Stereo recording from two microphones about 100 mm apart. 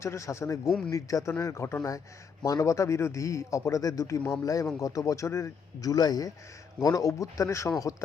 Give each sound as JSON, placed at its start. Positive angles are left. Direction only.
{"t": 0.0, "sound": "a man's voice", "side_deg": 30}